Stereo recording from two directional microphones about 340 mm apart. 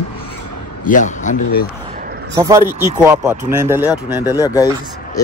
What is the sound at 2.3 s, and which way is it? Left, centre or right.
Speech, centre.